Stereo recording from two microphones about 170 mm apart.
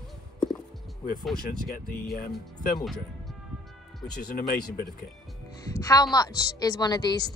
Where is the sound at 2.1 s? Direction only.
55° left (ahead or behind).